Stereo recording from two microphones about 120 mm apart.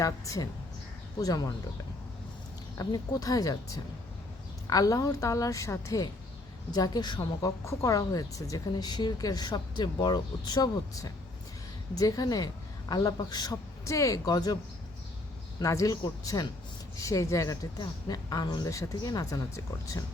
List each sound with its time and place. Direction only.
0.0 s speech: 30° left (ahead or behind)
2.7 s speech: 30° left (ahead or behind)
7.6 s speech: 25° left (ahead or behind)